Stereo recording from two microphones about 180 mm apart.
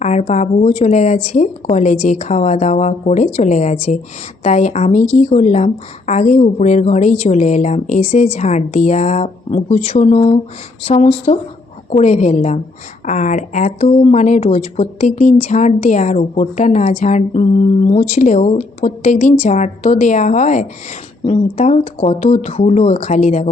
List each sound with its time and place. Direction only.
0.0 s a woman's voice: 40° left (ahead or behind)